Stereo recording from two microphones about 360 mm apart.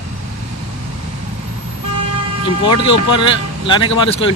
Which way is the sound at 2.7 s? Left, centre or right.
Left.